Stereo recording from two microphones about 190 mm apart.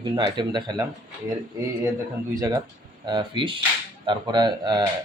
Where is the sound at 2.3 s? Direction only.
20° right (ahead or behind).